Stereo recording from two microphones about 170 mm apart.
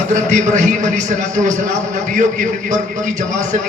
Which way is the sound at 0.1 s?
45° right (ahead or behind).